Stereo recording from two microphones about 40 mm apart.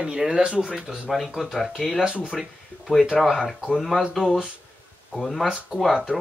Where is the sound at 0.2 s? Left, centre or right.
Right.